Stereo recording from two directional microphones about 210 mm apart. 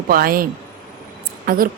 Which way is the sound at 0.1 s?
45° right (ahead or behind).